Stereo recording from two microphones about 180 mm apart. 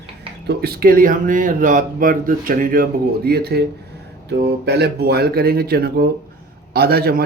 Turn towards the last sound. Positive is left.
turn(degrees=-60)  # may be behind; listen again after turning